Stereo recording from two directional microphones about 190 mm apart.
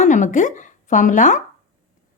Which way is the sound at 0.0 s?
40° left (ahead or behind).